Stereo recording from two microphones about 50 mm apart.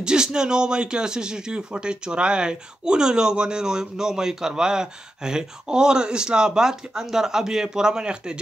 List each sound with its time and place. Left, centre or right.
0.0 s a man's voice: centre